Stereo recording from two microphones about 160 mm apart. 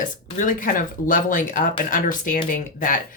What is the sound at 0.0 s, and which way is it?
Speech, 55° left (ahead or behind).